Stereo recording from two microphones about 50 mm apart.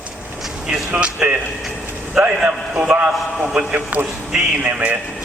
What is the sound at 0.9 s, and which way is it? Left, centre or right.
A man's voice, right.